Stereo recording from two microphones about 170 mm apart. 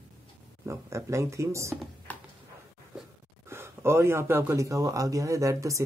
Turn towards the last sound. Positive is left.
turn(degrees=-20)  # may be behind; listen again after turning